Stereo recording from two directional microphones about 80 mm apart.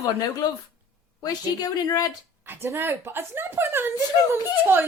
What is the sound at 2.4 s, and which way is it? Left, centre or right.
A woman's voice, right.